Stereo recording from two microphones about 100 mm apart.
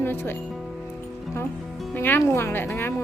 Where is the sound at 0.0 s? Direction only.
20° left (ahead or behind).